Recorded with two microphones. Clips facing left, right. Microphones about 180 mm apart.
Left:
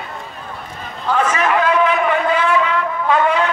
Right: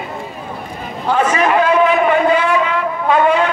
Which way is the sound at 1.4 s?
25° right (ahead or behind).